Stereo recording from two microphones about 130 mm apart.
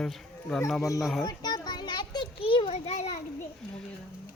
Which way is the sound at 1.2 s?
30° left (ahead or behind).